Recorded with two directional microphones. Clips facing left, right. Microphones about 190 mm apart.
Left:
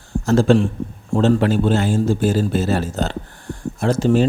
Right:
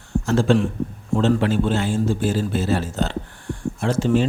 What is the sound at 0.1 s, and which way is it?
A man's voice, 40° left (ahead or behind).